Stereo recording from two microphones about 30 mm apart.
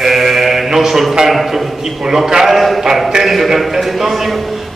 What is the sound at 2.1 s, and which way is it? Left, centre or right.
A man's voice, centre.